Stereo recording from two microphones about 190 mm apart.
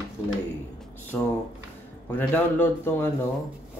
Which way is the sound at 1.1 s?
10° left (ahead or behind).